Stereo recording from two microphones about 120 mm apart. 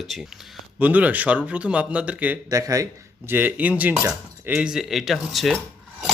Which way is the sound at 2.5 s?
30° right (ahead or behind).